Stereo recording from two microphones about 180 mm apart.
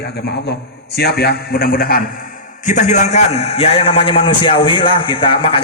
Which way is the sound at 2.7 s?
40° left (ahead or behind).